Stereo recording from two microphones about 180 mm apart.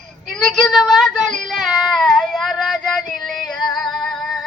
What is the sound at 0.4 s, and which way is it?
Male singing, centre (ahead or behind).